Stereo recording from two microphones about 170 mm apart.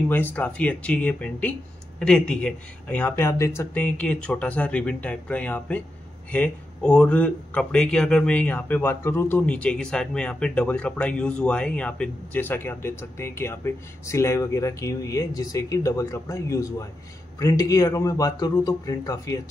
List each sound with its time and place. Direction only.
0.1 s a man's voice: 10° left (ahead or behind)